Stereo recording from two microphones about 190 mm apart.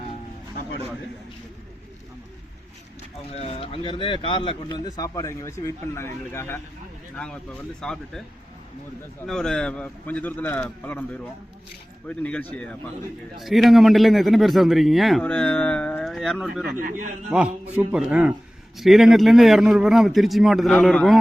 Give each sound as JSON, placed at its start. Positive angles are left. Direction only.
{"t": 3.3, "sound": "speech", "side_deg": 30}
{"t": 7.8, "sound": "a man's voice", "side_deg": 5}
{"t": 9.2, "sound": "a man's voice", "side_deg": 5}
{"t": 16.7, "sound": "a man's voice", "side_deg": -45}
{"t": 17.7, "sound": "a man's voice", "side_deg": -5}